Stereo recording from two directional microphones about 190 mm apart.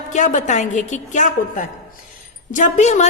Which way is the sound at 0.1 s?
40° left (ahead or behind).